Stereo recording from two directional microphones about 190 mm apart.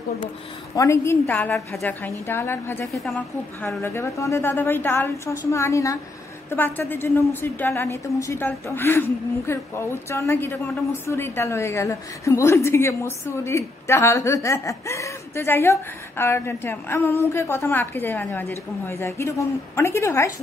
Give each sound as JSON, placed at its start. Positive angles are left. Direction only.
{"t": 0.7, "sound": "a woman's voice", "side_deg": 15}
{"t": 3.0, "sound": "a woman's voice", "side_deg": 0}
{"t": 3.6, "sound": "a woman's voice", "side_deg": 15}